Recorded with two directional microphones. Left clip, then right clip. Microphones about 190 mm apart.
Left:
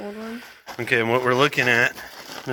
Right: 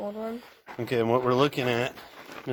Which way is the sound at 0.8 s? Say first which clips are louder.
Left 5 dB; 15° right (ahead or behind).